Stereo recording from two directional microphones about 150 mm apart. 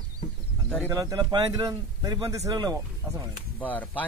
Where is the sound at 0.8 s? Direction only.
25° right (ahead or behind).